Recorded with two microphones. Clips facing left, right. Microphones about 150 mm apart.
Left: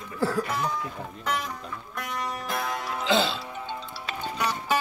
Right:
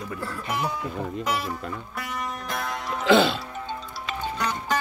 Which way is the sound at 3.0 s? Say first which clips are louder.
Right 6 dB; 60° right (ahead or behind).